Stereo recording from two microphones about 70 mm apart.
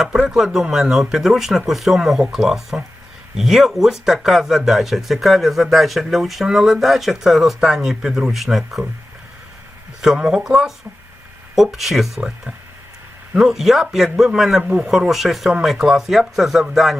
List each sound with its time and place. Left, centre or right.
0.3 s speech: centre
10.0 s speech: centre
13.3 s speech: centre
14.6 s speech: centre
14.8 s speech: centre